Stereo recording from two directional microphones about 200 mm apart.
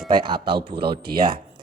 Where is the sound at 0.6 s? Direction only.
50° right (ahead or behind).